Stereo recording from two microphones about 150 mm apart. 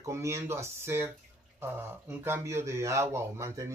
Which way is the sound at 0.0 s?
20° right (ahead or behind).